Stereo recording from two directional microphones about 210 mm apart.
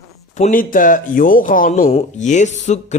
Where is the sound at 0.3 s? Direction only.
35° left (ahead or behind).